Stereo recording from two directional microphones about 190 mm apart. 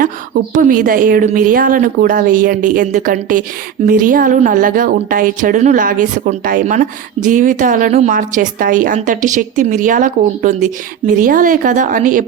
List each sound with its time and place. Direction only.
0.5 s speech: 45° right (ahead or behind)